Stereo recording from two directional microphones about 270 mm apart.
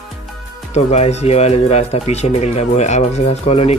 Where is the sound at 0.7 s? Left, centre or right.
Left.